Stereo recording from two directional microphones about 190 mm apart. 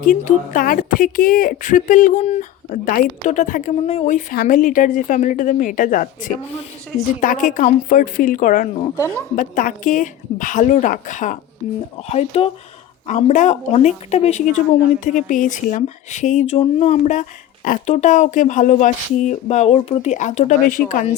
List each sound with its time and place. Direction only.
0.0 s speech: 45° left (ahead or behind)
9.0 s speech: 15° left (ahead or behind)
9.3 s speech: 45° left (ahead or behind)